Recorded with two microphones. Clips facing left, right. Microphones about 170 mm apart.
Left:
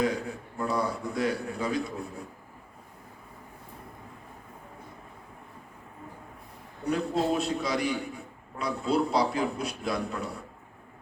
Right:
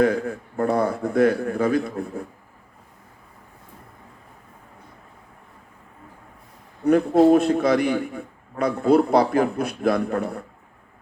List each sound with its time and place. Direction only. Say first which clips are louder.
0.0 s a man's voice: right 8 dB; 55° right (ahead or behind)
6.8 s a man's voice: right 12 dB; 55° right (ahead or behind)